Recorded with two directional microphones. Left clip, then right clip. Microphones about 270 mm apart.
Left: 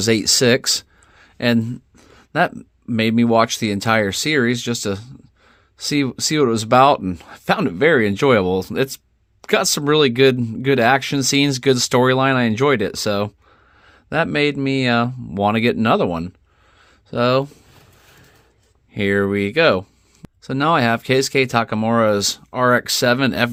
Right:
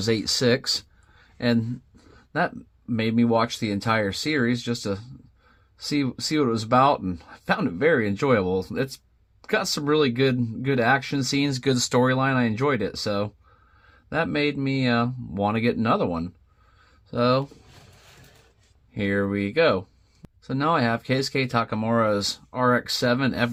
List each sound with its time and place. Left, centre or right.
0.0 s speech: left
18.9 s speech: left